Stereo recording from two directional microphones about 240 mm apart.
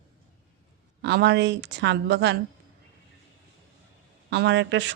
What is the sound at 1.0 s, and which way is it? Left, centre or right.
Speech, right.